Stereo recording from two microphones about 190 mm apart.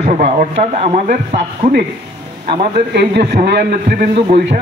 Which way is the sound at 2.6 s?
60° right (ahead or behind).